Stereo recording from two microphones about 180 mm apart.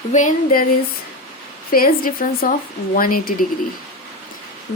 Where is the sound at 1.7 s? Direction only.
55° left (ahead or behind).